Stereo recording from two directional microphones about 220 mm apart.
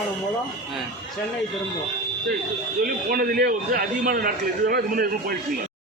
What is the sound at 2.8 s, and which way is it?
A man's voice, 40° right (ahead or behind).